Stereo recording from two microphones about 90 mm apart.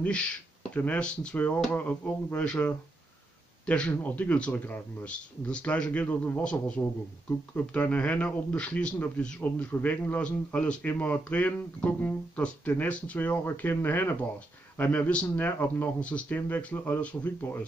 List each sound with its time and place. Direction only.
0.0 s a man's voice: 15° left (ahead or behind)